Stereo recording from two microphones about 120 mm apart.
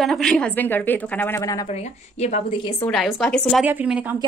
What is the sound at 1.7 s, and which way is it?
Speech, 65° left (ahead or behind).